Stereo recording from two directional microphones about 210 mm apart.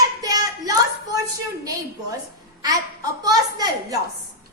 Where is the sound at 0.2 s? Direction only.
15° right (ahead or behind).